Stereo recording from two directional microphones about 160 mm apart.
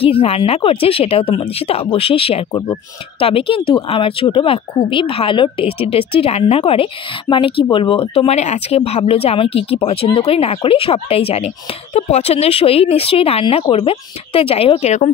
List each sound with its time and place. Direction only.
0.0 s speech: 35° left (ahead or behind)